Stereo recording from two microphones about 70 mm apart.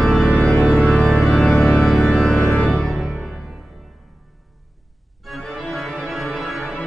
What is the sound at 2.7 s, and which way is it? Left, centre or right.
Music, centre.